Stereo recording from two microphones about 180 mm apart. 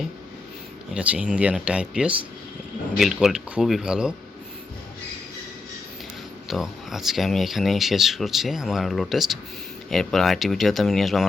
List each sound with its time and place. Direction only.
0.9 s speech: 5° right (ahead or behind)
6.5 s speech: centre (ahead or behind)